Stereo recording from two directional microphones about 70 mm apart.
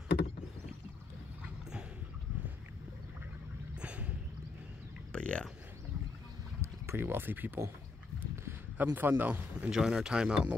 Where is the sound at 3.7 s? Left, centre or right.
Centre.